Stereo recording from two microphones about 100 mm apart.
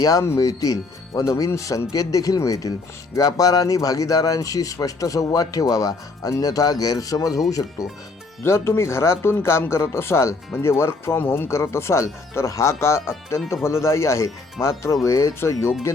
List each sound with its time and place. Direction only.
0.0 s speech: 40° left (ahead or behind)